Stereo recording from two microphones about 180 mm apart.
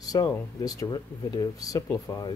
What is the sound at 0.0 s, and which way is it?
Speech, 20° left (ahead or behind).